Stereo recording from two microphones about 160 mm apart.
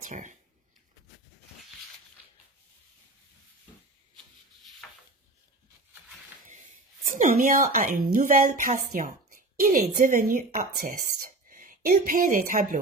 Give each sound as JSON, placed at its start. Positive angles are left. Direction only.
{"t": 0.1, "sound": "speech", "side_deg": -50}
{"t": 4.8, "sound": "a sound", "side_deg": 5}
{"t": 7.1, "sound": "speech", "side_deg": -55}